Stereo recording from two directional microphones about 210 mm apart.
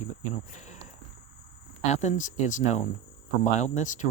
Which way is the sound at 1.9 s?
35° left (ahead or behind).